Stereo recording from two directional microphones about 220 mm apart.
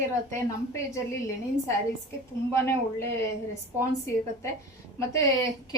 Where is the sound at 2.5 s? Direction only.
10° left (ahead or behind).